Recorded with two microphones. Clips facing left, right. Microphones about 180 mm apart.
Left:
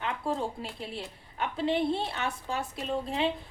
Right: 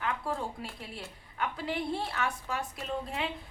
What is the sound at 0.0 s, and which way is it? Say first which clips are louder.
A woman's voice: left 3 dB; 25° left (ahead or behind).